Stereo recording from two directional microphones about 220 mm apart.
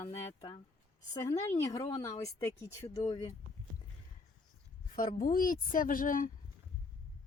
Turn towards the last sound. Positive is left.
turn(degrees=40)  # may be behind; listen again after turning